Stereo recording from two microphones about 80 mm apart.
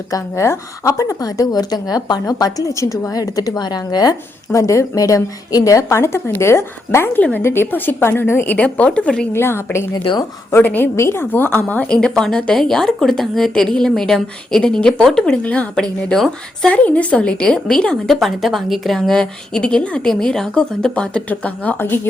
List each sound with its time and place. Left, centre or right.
0.1 s a woman's voice: left
4.5 s a woman's voice: left
7.2 s a woman's voice: centre
7.4 s a woman's voice: left
8.5 s a woman's voice: centre
9.3 s a woman's voice: left
9.9 s a woman's voice: left
10.6 s a woman's voice: left
10.9 s a woman's voice: left; by 16.7 s centre
16.7 s a woman's voice: centre
21.8 s a woman's voice: left